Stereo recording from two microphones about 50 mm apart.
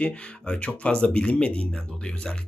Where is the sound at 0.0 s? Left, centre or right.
Left.